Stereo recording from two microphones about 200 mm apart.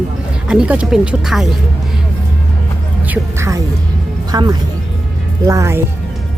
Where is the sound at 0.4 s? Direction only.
5° right (ahead or behind).